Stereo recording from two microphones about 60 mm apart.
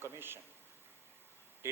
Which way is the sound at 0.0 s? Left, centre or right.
Right.